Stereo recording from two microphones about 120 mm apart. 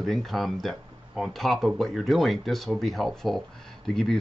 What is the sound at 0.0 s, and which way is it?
Speech, centre (ahead or behind).